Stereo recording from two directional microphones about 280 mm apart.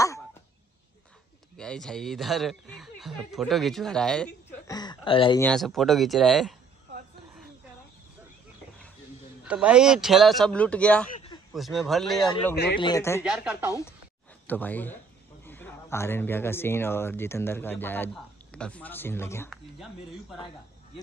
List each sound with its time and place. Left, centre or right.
1.6 s speech: centre
4.6 s speech: centre
5.4 s speech: centre
9.4 s speech: centre
11.1 s a sound: centre
11.5 s speech: centre
12.7 s speech: centre
13.2 s speech: centre
14.5 s speech: centre